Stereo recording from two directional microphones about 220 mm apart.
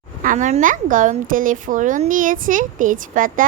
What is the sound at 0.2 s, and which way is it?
A woman's voice, 35° right (ahead or behind).